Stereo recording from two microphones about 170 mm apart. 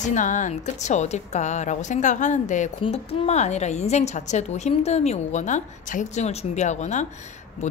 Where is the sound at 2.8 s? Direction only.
35° left (ahead or behind).